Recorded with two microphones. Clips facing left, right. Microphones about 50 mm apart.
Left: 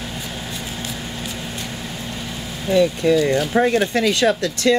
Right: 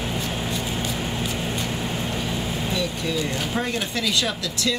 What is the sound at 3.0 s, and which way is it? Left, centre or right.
Speech, left.